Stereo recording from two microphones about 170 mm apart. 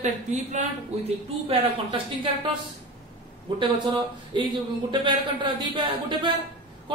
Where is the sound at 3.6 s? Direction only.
30° right (ahead or behind).